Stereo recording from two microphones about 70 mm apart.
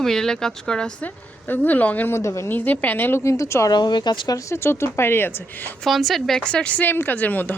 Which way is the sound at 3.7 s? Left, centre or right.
Left.